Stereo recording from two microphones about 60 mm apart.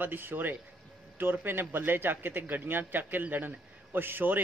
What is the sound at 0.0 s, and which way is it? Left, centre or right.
A man's voice, right.